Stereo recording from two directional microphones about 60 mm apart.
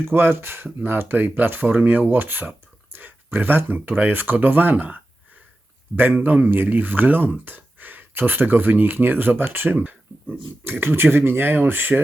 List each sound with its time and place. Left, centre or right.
0.1 s speech: right
6.0 s speech: right